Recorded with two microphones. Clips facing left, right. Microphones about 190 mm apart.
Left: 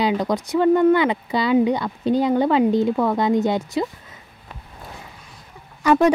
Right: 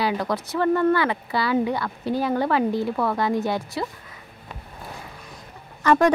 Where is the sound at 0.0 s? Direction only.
20° left (ahead or behind).